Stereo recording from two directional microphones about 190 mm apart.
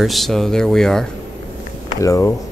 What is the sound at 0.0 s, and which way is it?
Speech, centre (ahead or behind).